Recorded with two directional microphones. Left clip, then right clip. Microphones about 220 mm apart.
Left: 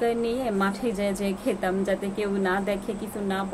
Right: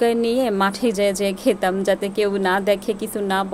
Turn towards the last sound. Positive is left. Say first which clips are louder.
# right 8 dB
turn(degrees=-50)  # may be behind; listen again after turning